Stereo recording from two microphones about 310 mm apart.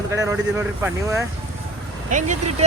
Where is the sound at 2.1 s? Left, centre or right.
Right.